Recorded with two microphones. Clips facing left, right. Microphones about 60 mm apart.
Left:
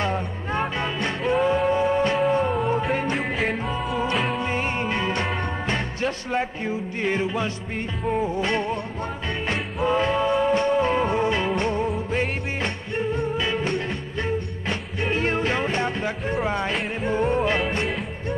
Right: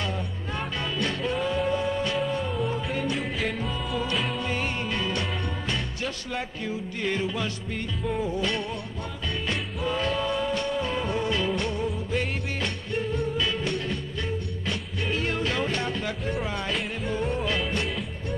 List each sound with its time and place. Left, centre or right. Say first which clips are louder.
0.0 s music: left 6 dB; left
3.3 s music: left 4 dB; centre
4.4 s music: left 4 dB; left